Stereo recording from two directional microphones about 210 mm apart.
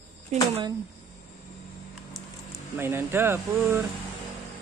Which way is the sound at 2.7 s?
10° right (ahead or behind).